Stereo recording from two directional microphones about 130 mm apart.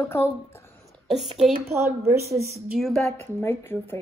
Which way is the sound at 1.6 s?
20° right (ahead or behind).